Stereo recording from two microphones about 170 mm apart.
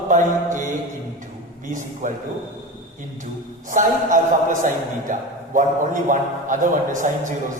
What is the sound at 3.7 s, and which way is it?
A man's voice, 50° right (ahead or behind).